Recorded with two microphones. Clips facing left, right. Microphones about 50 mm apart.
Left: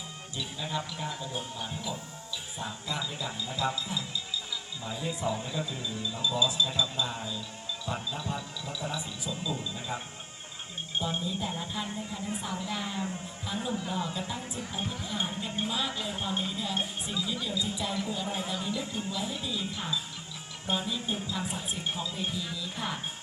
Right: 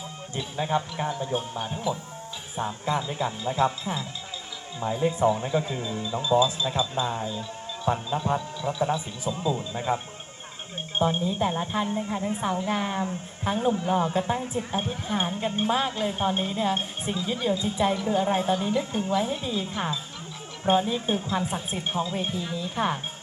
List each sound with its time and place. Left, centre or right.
0.3 s a woman's voice: right